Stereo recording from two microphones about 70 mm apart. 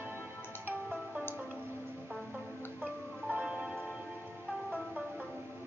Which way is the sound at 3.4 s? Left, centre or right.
Centre.